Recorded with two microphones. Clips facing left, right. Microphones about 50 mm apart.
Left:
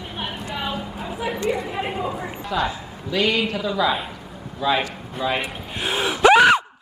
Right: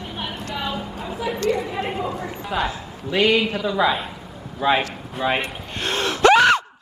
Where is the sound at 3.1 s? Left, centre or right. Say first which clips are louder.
Right 3 dB; right.